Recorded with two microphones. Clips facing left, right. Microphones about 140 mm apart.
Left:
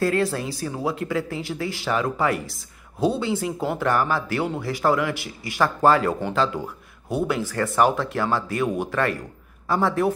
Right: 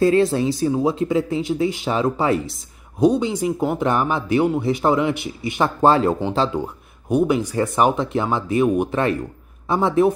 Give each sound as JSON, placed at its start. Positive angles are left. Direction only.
{"t": 0.0, "sound": "speech", "side_deg": -25}